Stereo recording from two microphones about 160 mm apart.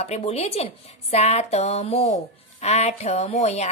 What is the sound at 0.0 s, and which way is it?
A woman's voice, 40° left (ahead or behind).